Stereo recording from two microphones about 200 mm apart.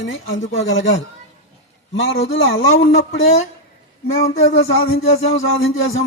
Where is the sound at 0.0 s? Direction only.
70° left (ahead or behind).